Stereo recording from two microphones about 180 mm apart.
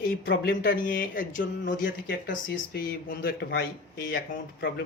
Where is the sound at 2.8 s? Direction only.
55° left (ahead or behind).